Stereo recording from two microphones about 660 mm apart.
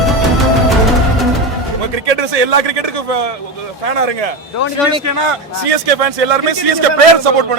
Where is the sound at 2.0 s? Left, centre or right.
Right.